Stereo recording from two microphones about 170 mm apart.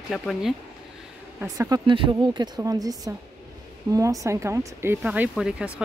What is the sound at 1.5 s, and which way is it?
Speech, 20° right (ahead or behind).